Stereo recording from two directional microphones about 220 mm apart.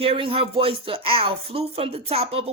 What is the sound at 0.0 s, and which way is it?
Speech, 25° right (ahead or behind).